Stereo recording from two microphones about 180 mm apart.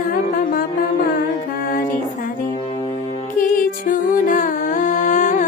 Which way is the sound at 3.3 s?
45° left (ahead or behind).